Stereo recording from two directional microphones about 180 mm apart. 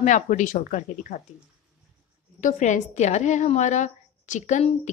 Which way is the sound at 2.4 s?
45° left (ahead or behind).